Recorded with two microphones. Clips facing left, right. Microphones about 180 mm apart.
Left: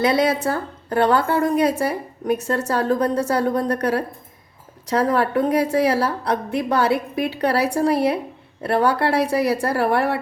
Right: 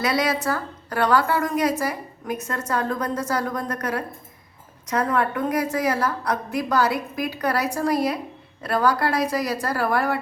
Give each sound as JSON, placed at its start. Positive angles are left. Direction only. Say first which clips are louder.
{"t": 0.0, "sound": "a woman's voice", "louder": "left 4 dB", "side_deg": 25}